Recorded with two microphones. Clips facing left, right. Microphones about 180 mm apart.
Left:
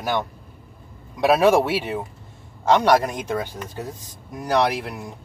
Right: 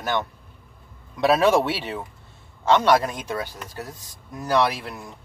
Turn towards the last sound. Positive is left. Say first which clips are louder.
# left 2 dB
turn(degrees=15)  # may be behind; listen again after turning